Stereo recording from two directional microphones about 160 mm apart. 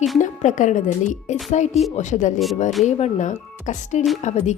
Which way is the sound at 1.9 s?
50° left (ahead or behind).